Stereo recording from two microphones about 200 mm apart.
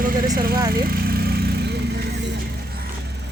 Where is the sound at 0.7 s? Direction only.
50° right (ahead or behind).